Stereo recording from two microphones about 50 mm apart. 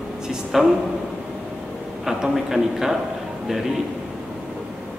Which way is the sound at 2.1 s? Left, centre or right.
Centre.